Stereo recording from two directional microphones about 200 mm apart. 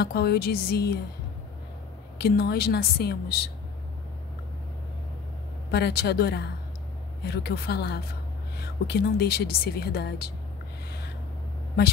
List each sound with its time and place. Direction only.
0.0 s a woman's voice: 55° left (ahead or behind)
2.1 s a woman's voice: 50° left (ahead or behind)
5.7 s a woman's voice: 55° left (ahead or behind)